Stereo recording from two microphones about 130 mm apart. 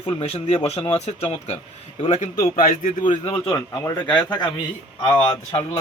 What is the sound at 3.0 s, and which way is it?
Speech, 40° left (ahead or behind).